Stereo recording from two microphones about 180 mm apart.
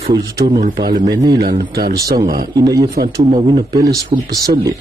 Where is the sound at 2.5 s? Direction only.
20° right (ahead or behind).